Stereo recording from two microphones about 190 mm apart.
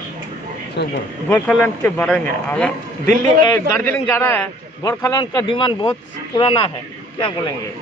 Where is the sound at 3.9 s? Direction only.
10° left (ahead or behind); by 6.7 s 25° left (ahead or behind).